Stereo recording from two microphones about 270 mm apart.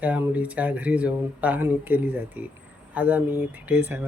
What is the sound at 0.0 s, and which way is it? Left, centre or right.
Speech, centre.